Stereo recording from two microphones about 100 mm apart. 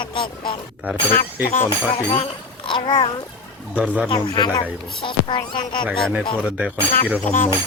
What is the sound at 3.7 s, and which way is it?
Speech, 10° right (ahead or behind).